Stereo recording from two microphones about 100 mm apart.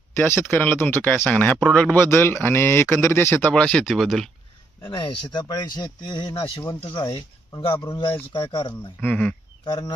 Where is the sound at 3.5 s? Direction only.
10° left (ahead or behind).